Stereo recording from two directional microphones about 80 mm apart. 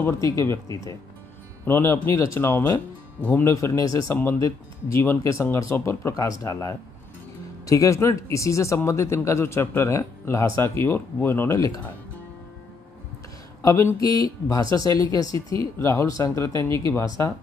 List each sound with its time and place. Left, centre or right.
0.2 s speech: left
1.6 s speech: left
3.4 s speech: left
4.1 s speech: left
4.4 s speech: left
6.1 s speech: left
13.6 s speech: left
16.6 s speech: left